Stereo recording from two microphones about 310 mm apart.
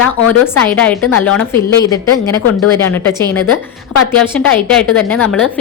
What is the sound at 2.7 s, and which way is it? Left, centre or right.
Speech, centre.